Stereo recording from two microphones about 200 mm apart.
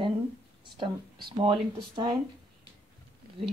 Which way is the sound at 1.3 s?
25° right (ahead or behind).